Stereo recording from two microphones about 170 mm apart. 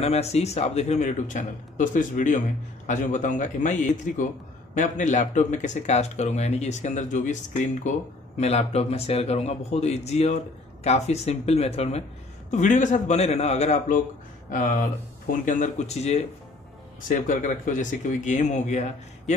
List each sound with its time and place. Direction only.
0.0 s a man's voice: 40° left (ahead or behind)